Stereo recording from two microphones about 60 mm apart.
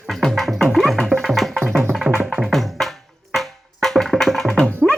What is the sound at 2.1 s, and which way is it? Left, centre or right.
Music, centre.